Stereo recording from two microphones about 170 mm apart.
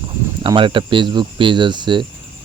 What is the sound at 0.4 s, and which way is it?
Speech, 30° right (ahead or behind).